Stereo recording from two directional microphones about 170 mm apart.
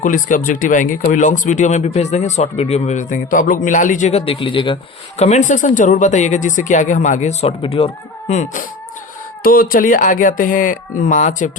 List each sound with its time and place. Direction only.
0.0 s speech: 50° left (ahead or behind); by 4.8 s 30° left (ahead or behind)
5.2 s speech: 45° left (ahead or behind)
9.4 s speech: 55° left (ahead or behind)